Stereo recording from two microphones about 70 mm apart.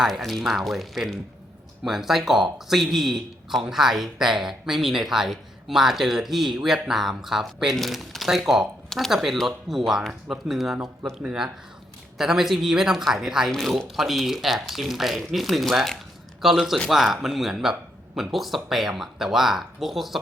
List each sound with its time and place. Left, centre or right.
0.0 s speech: centre
11.2 s speech: centre
12.1 s speech: centre